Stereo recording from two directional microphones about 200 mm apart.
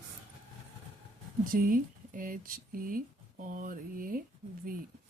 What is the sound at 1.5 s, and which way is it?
Speech, 45° right (ahead or behind).